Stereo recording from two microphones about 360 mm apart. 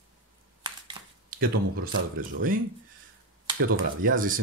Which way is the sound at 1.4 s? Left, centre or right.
Right.